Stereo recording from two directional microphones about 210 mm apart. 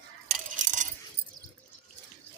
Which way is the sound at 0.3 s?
35° right (ahead or behind).